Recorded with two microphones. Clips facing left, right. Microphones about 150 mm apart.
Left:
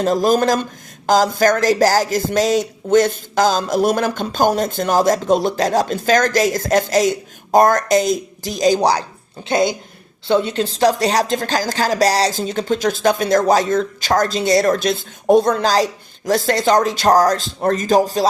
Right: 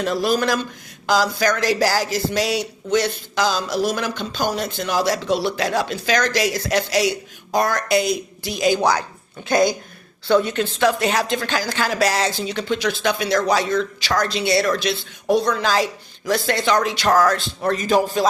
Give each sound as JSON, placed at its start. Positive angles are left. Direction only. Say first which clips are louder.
{"t": 0.0, "sound": "speech", "louder": "left 5 dB", "side_deg": 45}